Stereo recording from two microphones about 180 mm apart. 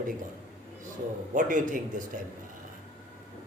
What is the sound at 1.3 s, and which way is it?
Speech, 45° right (ahead or behind).